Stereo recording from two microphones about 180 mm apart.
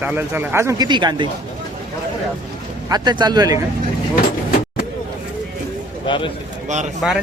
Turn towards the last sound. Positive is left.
turn(degrees=-5)  # may be behind; listen again after turning